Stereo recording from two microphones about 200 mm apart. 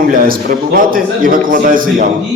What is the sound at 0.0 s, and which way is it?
A man's voice, 45° right (ahead or behind).